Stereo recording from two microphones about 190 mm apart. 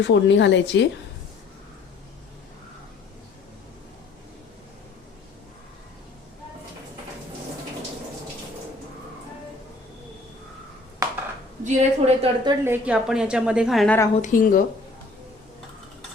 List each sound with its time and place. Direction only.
0.0 s a woman's voice: 70° left (ahead or behind)
11.6 s a woman's voice: 35° right (ahead or behind)
12.5 s a woman's voice: 10° right (ahead or behind)
14.2 s speech: 45° left (ahead or behind)